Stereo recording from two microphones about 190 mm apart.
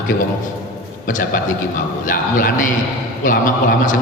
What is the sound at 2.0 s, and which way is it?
Speech, 45° left (ahead or behind).